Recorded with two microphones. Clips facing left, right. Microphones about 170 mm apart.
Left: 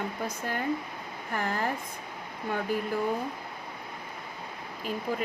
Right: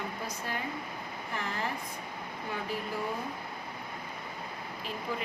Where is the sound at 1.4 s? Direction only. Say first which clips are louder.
Left 6 dB; 50° left (ahead or behind).